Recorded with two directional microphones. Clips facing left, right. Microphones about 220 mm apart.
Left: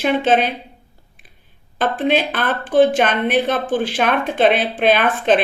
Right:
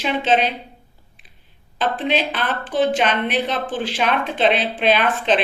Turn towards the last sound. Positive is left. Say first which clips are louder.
# left 3 dB
turn(degrees=50)  # may be behind; listen again after turning